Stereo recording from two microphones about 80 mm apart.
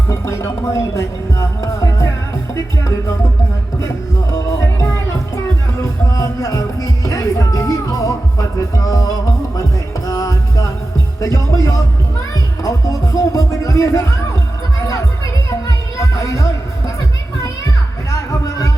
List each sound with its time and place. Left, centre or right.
0.1 s speech: left
2.6 s music: left
4.3 s music: left
18.1 s music: left